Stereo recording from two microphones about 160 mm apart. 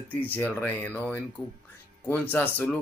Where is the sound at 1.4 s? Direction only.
20° left (ahead or behind).